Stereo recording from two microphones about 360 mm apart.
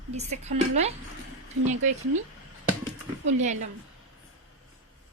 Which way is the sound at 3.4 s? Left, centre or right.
Centre.